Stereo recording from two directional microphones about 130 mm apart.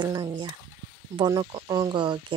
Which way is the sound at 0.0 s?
30° right (ahead or behind).